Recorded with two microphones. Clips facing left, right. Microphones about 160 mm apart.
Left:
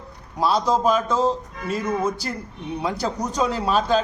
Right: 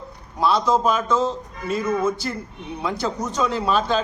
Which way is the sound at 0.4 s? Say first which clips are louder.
Right 1 dB; 35° left (ahead or behind).